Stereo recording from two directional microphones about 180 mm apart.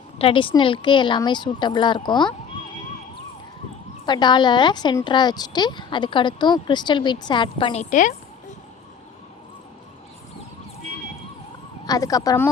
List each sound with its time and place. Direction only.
0.2 s a woman's voice: 30° left (ahead or behind)
4.0 s a woman's voice: 25° left (ahead or behind); by 8.1 s 45° left (ahead or behind)
11.9 s a woman's voice: 20° left (ahead or behind)